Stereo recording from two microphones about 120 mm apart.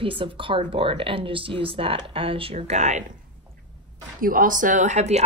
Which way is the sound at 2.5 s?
70° right (ahead or behind).